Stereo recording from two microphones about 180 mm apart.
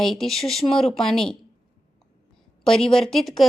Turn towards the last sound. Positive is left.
turn(degrees=0)  # may be behind; listen again after turning